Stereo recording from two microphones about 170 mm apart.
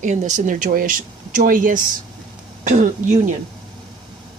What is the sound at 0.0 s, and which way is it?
Speech, 45° right (ahead or behind).